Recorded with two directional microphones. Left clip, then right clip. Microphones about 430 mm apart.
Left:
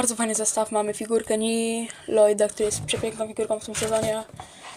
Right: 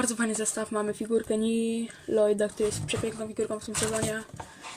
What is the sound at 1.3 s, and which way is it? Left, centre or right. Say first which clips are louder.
Speech: left 4 dB; left.